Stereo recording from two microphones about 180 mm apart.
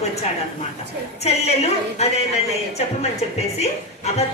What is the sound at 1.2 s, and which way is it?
Speech, 35° left (ahead or behind).